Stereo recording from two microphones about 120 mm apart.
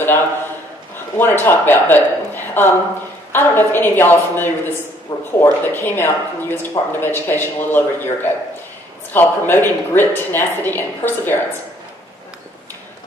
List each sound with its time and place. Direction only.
1.1 s a woman's voice: 20° left (ahead or behind)